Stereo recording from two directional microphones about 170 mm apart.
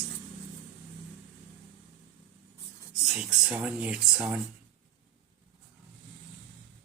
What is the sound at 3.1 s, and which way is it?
Speech, 5° right (ahead or behind).